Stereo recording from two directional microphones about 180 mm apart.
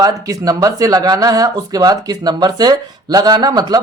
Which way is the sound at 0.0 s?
20° right (ahead or behind).